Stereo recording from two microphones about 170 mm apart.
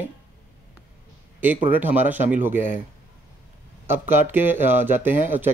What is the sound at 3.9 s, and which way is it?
Speech, 15° right (ahead or behind).